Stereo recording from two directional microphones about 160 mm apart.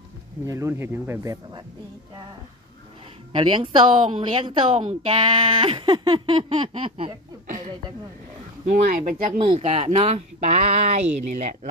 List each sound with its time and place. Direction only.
0.5 s speech: 15° right (ahead or behind)
3.3 s speech: 30° right (ahead or behind)
4.7 s speech: 45° right (ahead or behind)
5.1 s speech: 30° right (ahead or behind)
8.7 s speech: 55° right (ahead or behind)